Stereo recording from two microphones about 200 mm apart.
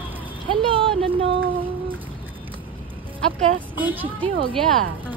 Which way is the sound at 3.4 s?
40° right (ahead or behind).